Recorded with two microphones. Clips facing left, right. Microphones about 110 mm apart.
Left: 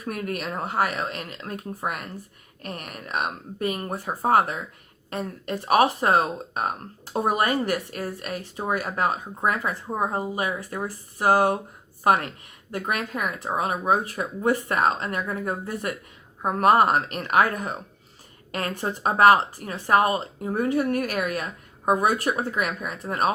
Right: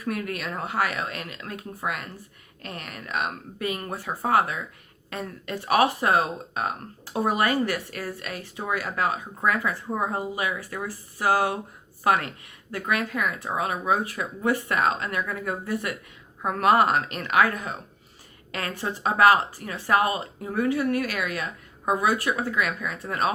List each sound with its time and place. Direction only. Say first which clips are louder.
0.0 s speech: even; 35° left (ahead or behind)
12.7 s a woman's voice: right 1 dB; 25° left (ahead or behind)
13.4 s speech: left 2 dB; 35° left (ahead or behind)